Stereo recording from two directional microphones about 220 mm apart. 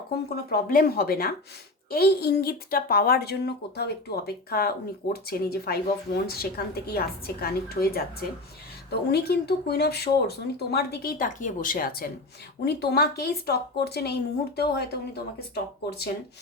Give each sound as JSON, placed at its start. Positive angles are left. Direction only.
{"t": 0.5, "sound": "speech", "side_deg": 40}